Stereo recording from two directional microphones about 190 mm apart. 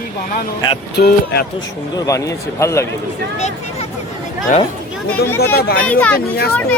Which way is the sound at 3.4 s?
35° left (ahead or behind).